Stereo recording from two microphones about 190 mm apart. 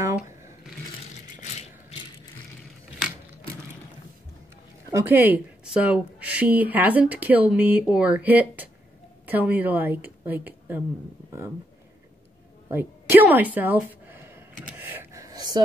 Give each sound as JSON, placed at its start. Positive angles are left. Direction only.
{"t": 1.3, "sound": "rattle", "side_deg": 40}
{"t": 4.9, "sound": "a woman's voice", "side_deg": -10}
{"t": 12.6, "sound": "a sound", "side_deg": -10}